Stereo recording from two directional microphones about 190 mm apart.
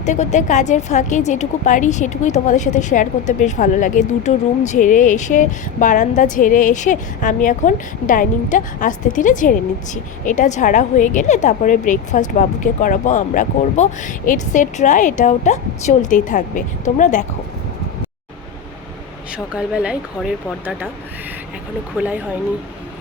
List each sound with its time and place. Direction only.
0.0 s a woman's voice: 40° left (ahead or behind)
19.5 s speech: 5° right (ahead or behind)
21.9 s speech: 10° right (ahead or behind)